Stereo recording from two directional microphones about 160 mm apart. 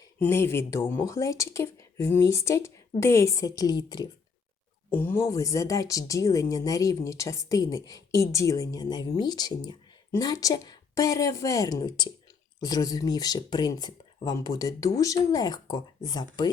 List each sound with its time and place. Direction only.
0.2 s speech: 15° left (ahead or behind)
4.9 s speech: 15° left (ahead or behind)